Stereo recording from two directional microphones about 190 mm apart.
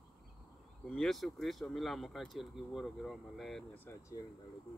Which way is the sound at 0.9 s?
Centre (ahead or behind).